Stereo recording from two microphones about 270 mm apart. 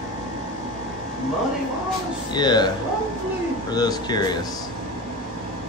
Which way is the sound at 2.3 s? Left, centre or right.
Centre.